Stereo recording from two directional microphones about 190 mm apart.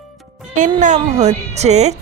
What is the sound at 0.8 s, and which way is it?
A woman's voice, 40° right (ahead or behind).